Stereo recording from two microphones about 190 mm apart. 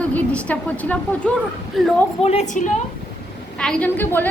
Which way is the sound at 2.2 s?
30° left (ahead or behind).